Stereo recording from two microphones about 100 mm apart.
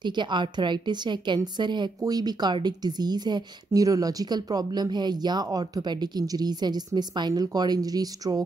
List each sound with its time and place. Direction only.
0.0 s a woman's voice: 50° right (ahead or behind)